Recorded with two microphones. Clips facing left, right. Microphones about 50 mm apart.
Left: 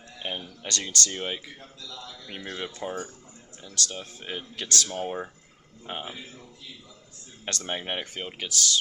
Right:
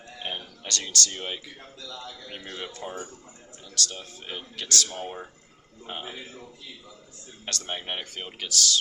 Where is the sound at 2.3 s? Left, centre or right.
Centre.